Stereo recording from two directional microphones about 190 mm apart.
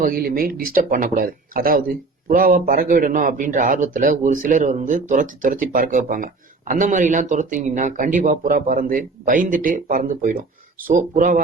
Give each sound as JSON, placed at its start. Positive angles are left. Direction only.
{"t": 0.0, "sound": "a man's voice", "side_deg": -50}